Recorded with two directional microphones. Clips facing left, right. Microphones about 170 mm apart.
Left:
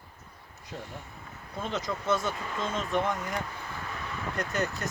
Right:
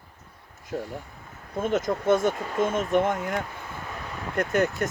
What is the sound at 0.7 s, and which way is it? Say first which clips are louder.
Speech: right 8 dB; 55° right (ahead or behind).